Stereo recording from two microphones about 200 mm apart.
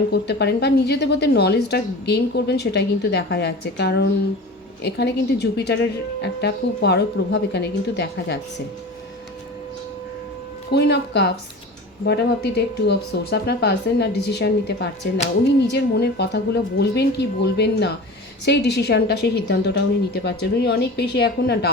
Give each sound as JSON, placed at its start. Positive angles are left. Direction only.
{"t": 0.1, "sound": "a woman's voice", "side_deg": 55}
{"t": 10.7, "sound": "a woman's voice", "side_deg": 55}